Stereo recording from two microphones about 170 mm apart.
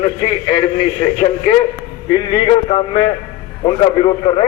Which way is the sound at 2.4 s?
30° left (ahead or behind).